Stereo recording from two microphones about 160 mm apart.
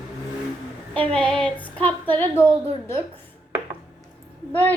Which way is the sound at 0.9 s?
5° left (ahead or behind).